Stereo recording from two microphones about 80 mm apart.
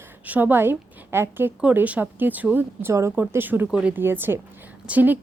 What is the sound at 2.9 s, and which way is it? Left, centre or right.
Speech, right.